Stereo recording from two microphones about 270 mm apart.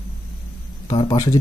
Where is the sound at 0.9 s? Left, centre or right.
Centre.